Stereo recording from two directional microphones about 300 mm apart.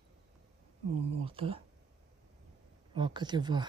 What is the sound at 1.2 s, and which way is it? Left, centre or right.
Speech, centre.